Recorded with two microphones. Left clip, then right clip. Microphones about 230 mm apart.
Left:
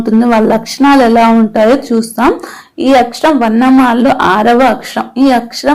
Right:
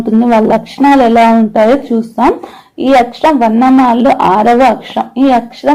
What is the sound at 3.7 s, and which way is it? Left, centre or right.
Speech, left.